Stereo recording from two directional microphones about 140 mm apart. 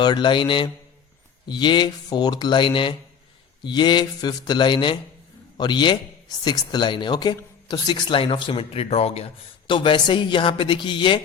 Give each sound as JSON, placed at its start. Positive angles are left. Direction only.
{"t": 0.0, "sound": "speech", "side_deg": 30}